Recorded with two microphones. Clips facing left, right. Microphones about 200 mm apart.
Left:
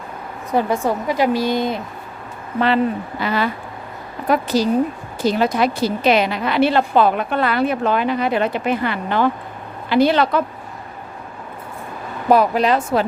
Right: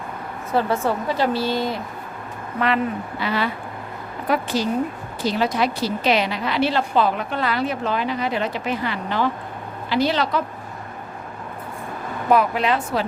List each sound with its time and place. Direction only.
0.5 s a woman's voice: 15° left (ahead or behind)
2.6 s speech: 30° left (ahead or behind)
3.2 s a woman's voice: 45° left (ahead or behind)
12.3 s speech: 35° left (ahead or behind)